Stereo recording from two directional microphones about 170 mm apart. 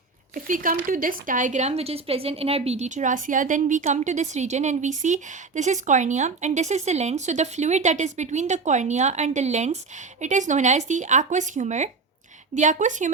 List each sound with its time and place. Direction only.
0.3 s a woman's voice: 50° right (ahead or behind)